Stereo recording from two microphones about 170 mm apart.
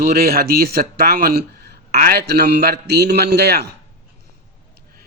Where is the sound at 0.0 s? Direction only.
65° right (ahead or behind).